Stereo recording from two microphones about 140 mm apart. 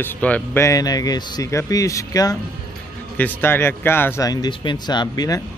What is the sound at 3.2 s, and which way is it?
Speech, 15° left (ahead or behind).